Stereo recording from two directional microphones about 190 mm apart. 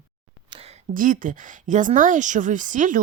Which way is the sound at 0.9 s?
45° right (ahead or behind).